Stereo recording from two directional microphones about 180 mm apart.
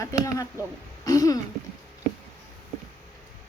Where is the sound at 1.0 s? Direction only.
20° left (ahead or behind).